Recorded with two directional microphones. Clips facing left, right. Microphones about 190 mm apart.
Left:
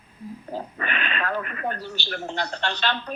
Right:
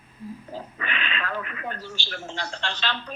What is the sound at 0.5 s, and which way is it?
A man's voice, 50° left (ahead or behind).